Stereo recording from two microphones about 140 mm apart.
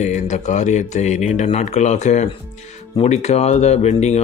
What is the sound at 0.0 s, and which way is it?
Speech, 55° left (ahead or behind).